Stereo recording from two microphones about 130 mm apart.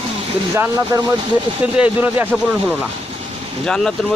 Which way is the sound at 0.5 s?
20° right (ahead or behind).